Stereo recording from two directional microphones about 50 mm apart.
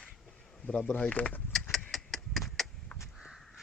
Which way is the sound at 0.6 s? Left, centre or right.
Centre.